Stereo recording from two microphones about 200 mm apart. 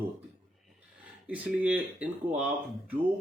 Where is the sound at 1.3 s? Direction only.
5° right (ahead or behind).